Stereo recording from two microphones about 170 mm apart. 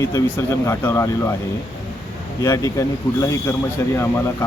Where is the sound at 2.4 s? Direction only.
20° left (ahead or behind).